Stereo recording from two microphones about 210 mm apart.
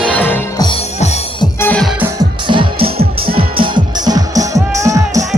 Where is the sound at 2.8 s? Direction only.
45° right (ahead or behind).